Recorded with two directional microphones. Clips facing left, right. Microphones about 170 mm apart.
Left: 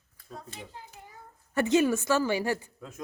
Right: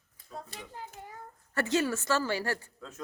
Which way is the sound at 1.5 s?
15° left (ahead or behind).